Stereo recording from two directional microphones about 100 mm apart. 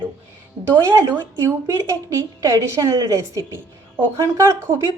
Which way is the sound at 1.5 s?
30° right (ahead or behind).